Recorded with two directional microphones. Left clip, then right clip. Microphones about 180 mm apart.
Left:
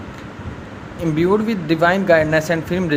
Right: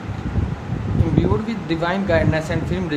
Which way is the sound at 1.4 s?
30° left (ahead or behind).